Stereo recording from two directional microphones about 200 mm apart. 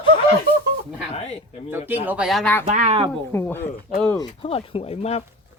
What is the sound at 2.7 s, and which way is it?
Speech, 35° right (ahead or behind).